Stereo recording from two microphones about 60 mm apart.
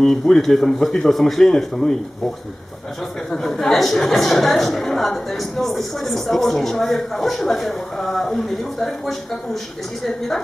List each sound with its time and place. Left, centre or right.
0.0 s a woman's voice: centre